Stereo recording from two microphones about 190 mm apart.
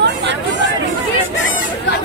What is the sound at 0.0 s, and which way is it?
Chatter, 70° right (ahead or behind).